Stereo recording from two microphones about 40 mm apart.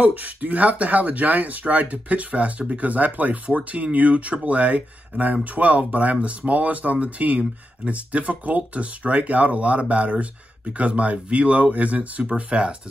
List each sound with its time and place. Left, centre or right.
0.0 s speech: right